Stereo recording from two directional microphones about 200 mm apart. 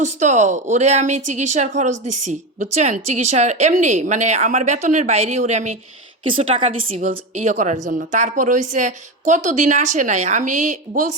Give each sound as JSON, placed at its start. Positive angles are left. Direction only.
{"t": 0.0, "sound": "a woman's voice", "side_deg": -35}